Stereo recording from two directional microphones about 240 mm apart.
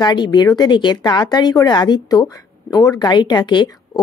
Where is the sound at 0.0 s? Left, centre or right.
Centre.